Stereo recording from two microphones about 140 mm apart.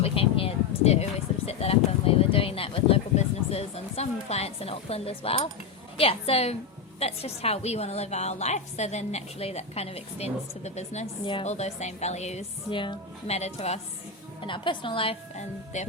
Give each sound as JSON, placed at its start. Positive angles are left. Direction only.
{"t": 0.0, "sound": "a sound", "side_deg": 40}
{"t": 6.0, "sound": "a woman's voice", "side_deg": 45}
{"t": 14.4, "sound": "a woman's voice", "side_deg": 35}
{"t": 15.4, "sound": "speech", "side_deg": 55}